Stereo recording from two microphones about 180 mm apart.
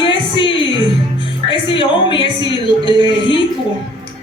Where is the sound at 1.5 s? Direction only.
25° left (ahead or behind).